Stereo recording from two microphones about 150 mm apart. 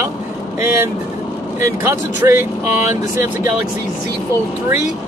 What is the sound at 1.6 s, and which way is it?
Speech, 15° right (ahead or behind).